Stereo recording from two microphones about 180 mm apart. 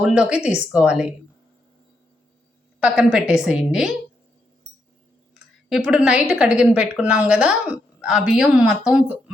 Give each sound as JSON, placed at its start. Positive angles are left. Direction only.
{"t": 0.0, "sound": "speech", "side_deg": -5}
{"t": 2.8, "sound": "speech", "side_deg": -5}
{"t": 5.3, "sound": "speech", "side_deg": -5}